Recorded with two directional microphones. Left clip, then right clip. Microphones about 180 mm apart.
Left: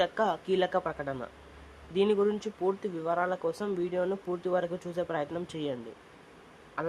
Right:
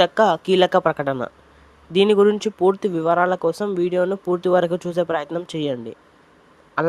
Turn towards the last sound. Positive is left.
turn(degrees=-50)  # may be behind; listen again after turning